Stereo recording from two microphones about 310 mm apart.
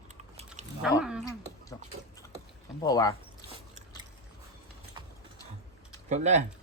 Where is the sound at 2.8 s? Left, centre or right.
Centre.